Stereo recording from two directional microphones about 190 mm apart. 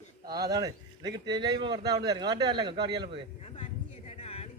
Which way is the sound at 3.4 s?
30° left (ahead or behind).